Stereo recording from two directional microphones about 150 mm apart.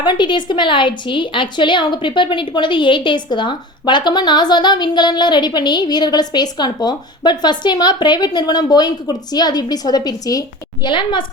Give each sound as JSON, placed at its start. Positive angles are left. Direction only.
{"t": 0.0, "sound": "a woman's voice", "side_deg": 30}